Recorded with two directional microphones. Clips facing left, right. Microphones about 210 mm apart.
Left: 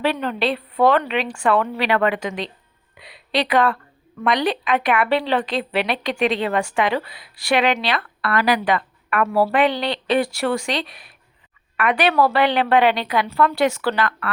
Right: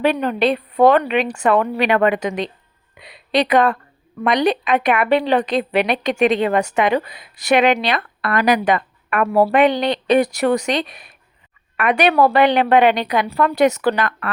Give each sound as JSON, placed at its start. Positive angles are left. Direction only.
{"t": 0.0, "sound": "a woman's voice", "side_deg": -15}